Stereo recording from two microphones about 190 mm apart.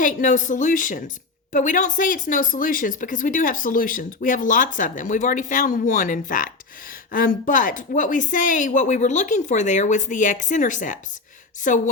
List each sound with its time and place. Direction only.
0.0 s a woman's voice: 40° left (ahead or behind)